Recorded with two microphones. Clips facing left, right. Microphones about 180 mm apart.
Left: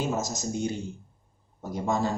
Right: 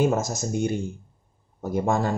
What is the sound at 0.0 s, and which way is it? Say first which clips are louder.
Speech: right 6 dB; 55° right (ahead or behind).